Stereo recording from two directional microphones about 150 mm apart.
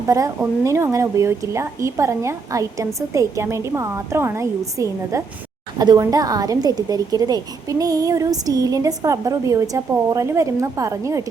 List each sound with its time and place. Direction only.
0.1 s a woman's voice: 20° right (ahead or behind)